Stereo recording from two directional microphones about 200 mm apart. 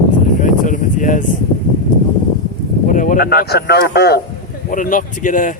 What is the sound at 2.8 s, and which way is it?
Speech, 40° left (ahead or behind).